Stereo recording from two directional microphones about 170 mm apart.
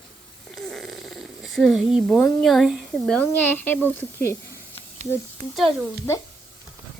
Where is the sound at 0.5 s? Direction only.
Centre (ahead or behind).